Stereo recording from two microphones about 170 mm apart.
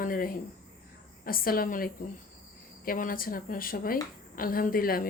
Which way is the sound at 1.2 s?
60° left (ahead or behind).